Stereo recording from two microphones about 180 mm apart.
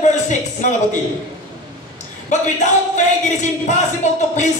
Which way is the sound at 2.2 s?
40° left (ahead or behind).